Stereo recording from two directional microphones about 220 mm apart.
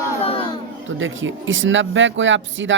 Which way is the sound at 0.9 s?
60° right (ahead or behind).